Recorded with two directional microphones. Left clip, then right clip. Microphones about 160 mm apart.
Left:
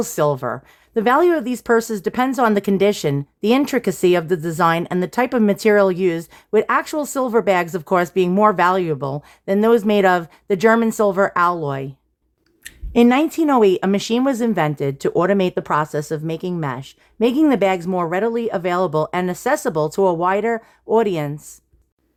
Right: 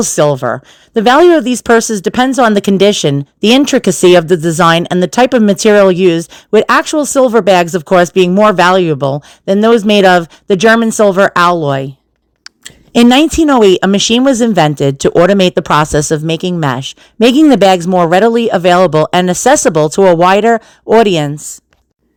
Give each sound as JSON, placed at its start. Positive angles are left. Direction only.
{"t": 0.0, "sound": "speech", "side_deg": -30}
{"t": 12.9, "sound": "speech", "side_deg": -45}